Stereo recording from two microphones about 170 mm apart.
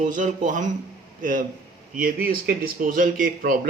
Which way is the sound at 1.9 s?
55° right (ahead or behind).